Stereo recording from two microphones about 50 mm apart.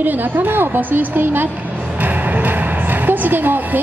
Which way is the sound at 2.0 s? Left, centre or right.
Right.